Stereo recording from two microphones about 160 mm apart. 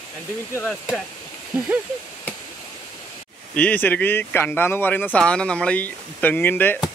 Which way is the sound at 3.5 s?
10° left (ahead or behind).